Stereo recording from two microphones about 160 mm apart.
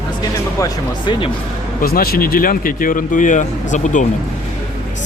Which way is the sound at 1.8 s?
70° left (ahead or behind).